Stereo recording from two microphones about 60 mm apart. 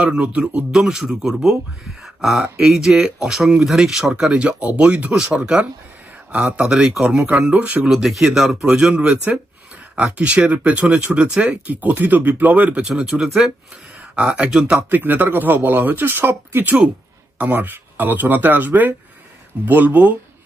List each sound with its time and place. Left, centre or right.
0.0 s speech: right
0.7 s speech: centre
2.6 s speech: centre
5.4 s speech: right
7.8 s speech: centre
13.0 s speech: centre
14.8 s speech: right